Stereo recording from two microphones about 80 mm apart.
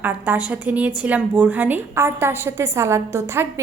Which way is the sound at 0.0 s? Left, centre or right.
Right.